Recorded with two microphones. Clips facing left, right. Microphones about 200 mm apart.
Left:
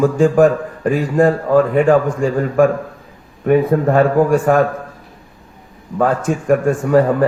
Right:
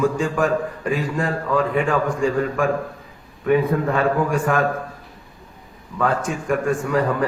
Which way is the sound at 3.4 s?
45° left (ahead or behind).